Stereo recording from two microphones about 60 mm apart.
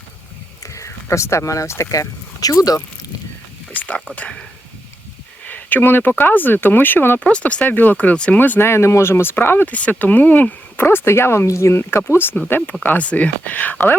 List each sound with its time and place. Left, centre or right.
0.6 s speech: left
3.7 s a sound: left
4.1 s speech: left
5.5 s speech: left
7.3 s speech: centre
8.4 s speech: left
9.6 s speech: left
10.8 s speech: left